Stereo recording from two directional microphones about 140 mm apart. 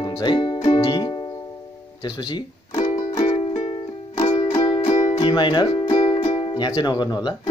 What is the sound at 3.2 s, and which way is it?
Music, 45° left (ahead or behind).